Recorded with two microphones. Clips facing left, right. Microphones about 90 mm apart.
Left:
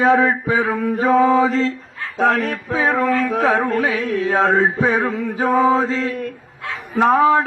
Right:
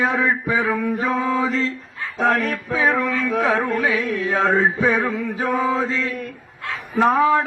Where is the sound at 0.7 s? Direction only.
30° left (ahead or behind).